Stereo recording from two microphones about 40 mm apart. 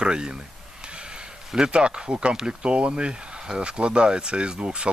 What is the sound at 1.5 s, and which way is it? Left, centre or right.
Speech, centre.